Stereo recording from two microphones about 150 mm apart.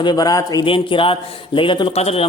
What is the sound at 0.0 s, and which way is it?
A man's voice, 25° left (ahead or behind).